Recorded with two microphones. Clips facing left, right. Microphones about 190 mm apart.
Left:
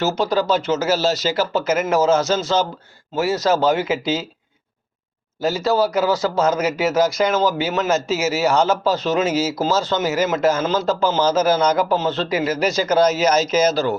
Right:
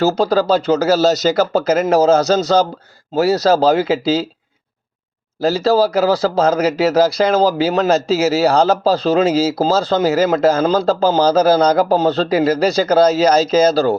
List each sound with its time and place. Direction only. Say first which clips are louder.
0.2 s speech: right 4 dB; 35° right (ahead or behind)
5.4 s speech: right 5 dB; 35° right (ahead or behind)